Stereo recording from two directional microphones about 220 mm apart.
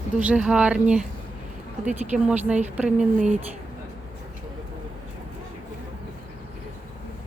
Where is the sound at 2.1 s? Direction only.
5° right (ahead or behind).